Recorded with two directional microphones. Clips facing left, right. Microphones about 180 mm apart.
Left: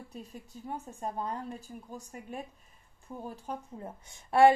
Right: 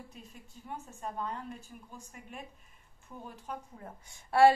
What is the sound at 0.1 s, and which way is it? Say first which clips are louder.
A woman's voice: left 7 dB; 40° left (ahead or behind).